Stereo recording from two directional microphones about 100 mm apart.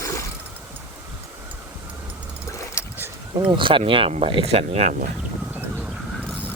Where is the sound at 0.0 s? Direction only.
30° left (ahead or behind).